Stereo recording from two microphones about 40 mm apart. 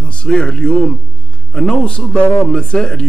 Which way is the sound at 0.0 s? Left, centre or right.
Left.